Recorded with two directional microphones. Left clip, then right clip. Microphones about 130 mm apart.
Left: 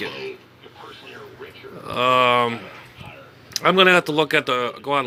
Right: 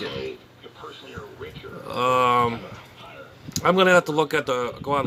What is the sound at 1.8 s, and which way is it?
Speech, 10° left (ahead or behind).